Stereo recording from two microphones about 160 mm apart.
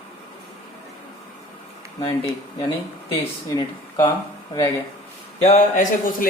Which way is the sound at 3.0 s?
30° left (ahead or behind).